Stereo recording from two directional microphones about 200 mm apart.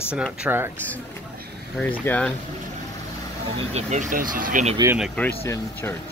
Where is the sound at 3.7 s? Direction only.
35° right (ahead or behind).